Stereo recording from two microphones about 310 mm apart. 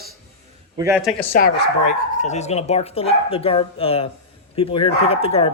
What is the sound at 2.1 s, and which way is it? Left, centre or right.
Speech, left.